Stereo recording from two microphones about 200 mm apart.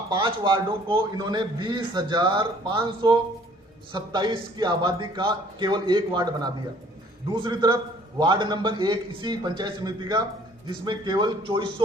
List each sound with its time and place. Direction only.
0.1 s a man's voice: 25° right (ahead or behind)